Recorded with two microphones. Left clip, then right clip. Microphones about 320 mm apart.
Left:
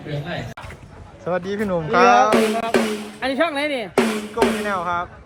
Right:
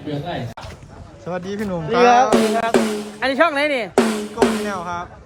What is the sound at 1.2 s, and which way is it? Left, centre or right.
Speech, centre.